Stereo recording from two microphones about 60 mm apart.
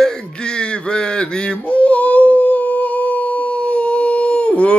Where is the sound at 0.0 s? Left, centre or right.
Centre.